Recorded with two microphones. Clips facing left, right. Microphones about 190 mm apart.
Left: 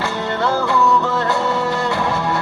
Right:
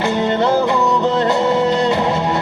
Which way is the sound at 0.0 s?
20° right (ahead or behind).